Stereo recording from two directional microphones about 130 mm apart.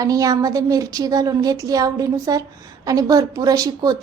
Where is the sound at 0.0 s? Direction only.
25° right (ahead or behind).